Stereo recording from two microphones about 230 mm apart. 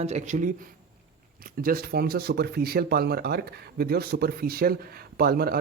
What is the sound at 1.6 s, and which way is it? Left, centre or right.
Speech, right.